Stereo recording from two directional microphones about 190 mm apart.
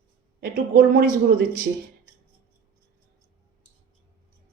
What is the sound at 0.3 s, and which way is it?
A woman's voice, 50° right (ahead or behind).